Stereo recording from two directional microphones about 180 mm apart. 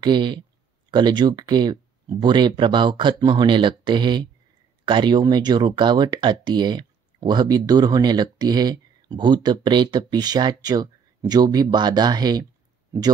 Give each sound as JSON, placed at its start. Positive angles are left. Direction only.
{"t": 0.0, "sound": "speech", "side_deg": -25}